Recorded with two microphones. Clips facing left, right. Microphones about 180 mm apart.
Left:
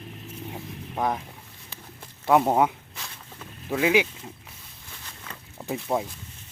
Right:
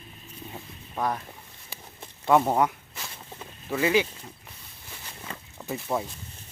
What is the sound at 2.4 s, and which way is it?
Speech, 20° left (ahead or behind).